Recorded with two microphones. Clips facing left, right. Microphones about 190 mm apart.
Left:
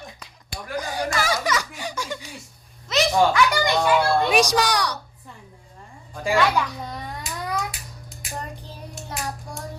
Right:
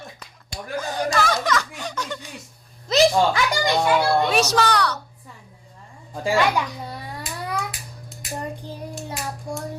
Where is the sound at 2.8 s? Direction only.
35° right (ahead or behind).